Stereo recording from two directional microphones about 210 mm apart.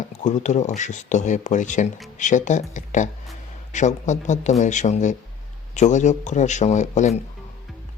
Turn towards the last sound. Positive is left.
turn(degrees=35)  # may be behind; listen again after turning